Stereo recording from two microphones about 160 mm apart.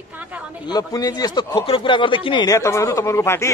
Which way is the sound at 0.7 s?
20° left (ahead or behind).